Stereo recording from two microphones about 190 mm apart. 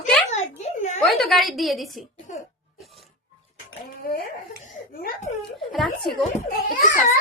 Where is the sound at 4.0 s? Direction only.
50° left (ahead or behind).